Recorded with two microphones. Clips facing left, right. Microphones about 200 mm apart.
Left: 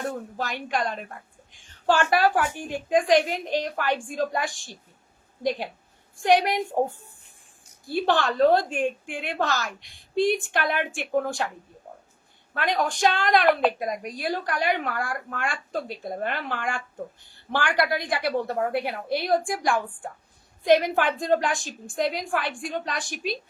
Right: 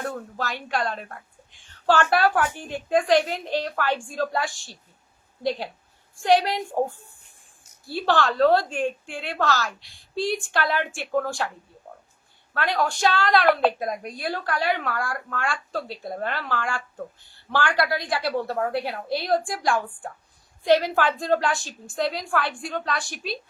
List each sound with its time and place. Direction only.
0.1 s speech: 15° left (ahead or behind)
2.6 s a woman's voice: 15° left (ahead or behind)
8.0 s a woman's voice: 20° left (ahead or behind)
12.5 s a woman's voice: 15° left (ahead or behind)
23.0 s speech: 45° left (ahead or behind)